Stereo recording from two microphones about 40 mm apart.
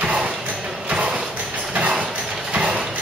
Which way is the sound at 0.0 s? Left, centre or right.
Right.